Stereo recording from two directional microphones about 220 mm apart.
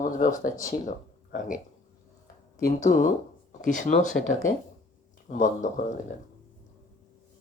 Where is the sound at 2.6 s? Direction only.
35° left (ahead or behind).